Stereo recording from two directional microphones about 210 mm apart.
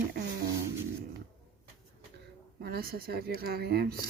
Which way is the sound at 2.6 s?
45° right (ahead or behind).